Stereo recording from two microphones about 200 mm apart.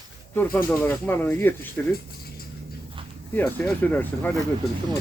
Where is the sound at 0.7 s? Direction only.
10° left (ahead or behind).